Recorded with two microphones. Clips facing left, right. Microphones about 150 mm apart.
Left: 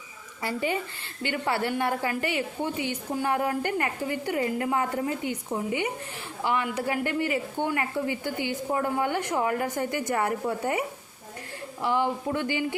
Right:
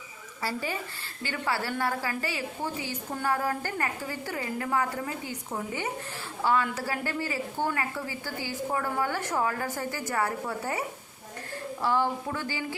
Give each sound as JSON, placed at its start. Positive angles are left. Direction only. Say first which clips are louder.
{"t": 0.4, "sound": "speech", "louder": "left 4 dB", "side_deg": 20}